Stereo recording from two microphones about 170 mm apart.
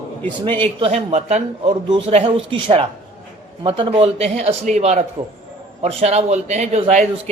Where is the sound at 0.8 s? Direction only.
40° right (ahead or behind).